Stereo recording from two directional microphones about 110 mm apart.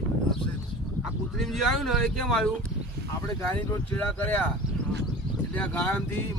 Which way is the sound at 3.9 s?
15° left (ahead or behind).